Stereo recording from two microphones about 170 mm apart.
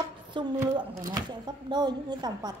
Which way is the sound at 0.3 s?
25° right (ahead or behind).